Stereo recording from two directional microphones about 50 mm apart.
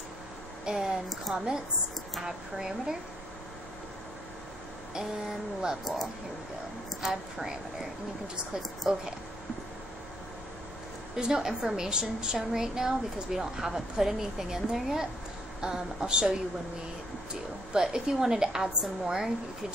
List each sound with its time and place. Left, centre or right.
0.7 s a woman's voice: centre
5.9 s a woman's voice: centre
8.8 s a woman's voice: centre
11.1 s a woman's voice: centre
17.3 s a woman's voice: centre